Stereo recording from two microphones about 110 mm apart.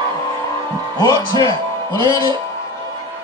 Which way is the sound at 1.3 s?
45° right (ahead or behind).